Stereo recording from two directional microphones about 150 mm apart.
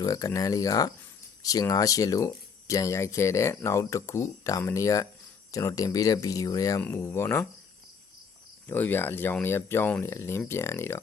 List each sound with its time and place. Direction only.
0.0 s speech: 20° left (ahead or behind)
8.6 s speech: 10° left (ahead or behind)